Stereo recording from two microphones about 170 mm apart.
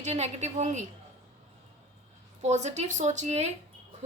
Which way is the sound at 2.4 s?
45° right (ahead or behind).